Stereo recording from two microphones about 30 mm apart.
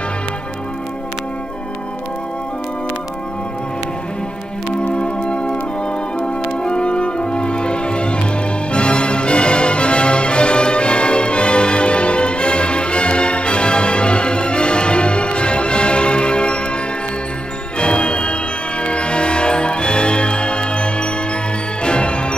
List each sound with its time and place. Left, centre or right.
4.8 s music: left
17.7 s music: left